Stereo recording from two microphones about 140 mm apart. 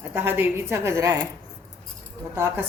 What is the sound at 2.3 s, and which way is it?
Speech, 20° right (ahead or behind).